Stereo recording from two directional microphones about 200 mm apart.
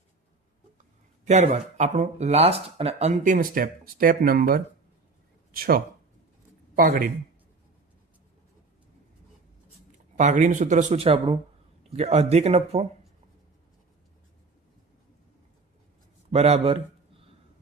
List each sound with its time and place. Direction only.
1.2 s speech: 35° right (ahead or behind)
10.2 s speech: 40° right (ahead or behind)
16.3 s speech: 30° right (ahead or behind)